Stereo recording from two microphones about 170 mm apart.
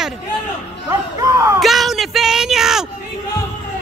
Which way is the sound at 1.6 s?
Centre (ahead or behind).